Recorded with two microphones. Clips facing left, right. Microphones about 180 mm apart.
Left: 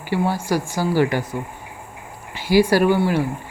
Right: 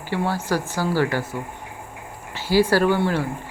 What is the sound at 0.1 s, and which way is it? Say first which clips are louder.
Speech: left 2 dB; 10° left (ahead or behind).